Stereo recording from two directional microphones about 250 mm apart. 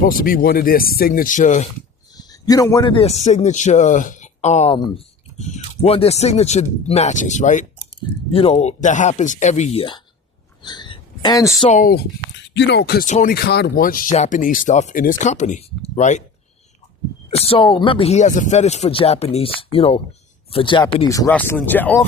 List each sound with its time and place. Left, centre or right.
0.0 s speech: left
2.1 s a man's voice: centre
10.6 s a sound: centre
11.7 s speech: left
17.3 s speech: left